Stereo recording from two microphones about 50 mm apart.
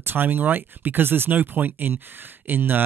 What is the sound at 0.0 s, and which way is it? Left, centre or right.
Speech, right.